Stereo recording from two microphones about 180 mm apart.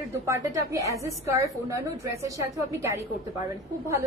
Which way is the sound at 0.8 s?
15° right (ahead or behind).